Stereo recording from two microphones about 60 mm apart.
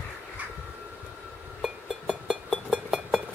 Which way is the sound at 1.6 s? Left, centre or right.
Centre.